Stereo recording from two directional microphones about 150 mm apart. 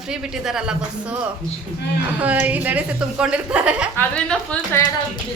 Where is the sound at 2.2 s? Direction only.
10° right (ahead or behind).